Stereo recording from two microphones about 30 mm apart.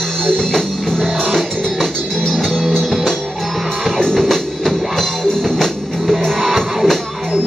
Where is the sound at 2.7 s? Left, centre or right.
Centre.